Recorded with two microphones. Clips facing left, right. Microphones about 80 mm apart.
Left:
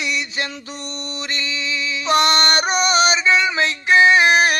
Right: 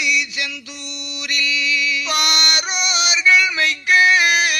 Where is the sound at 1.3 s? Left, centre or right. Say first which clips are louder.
Right 5 dB; left.